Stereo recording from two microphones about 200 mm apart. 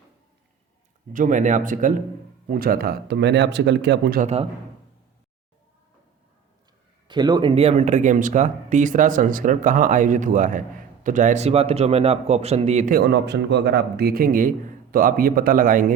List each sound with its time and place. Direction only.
1.1 s a man's voice: 40° right (ahead or behind); by 4.2 s 60° right (ahead or behind)
4.2 s a man's voice: 30° right (ahead or behind)
7.1 s a man's voice: 20° right (ahead or behind); by 15.9 s 40° right (ahead or behind)